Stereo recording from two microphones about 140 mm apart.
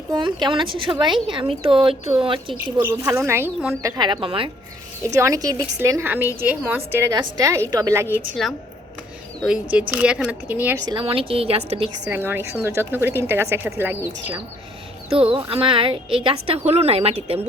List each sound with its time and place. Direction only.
0.1 s speech: 35° right (ahead or behind)
2.8 s speech: 20° right (ahead or behind)
3.9 s speech: 35° right (ahead or behind)
5.0 s a woman's voice: 20° right (ahead or behind)
8.4 s speech: 5° left (ahead or behind)
9.4 s speech: 10° right (ahead or behind)
10.8 s a woman's voice: 30° right (ahead or behind)
11.0 s a woman's voice: 40° right (ahead or behind)
12.1 s speech: 15° right (ahead or behind)
15.1 s a woman's voice: 40° right (ahead or behind)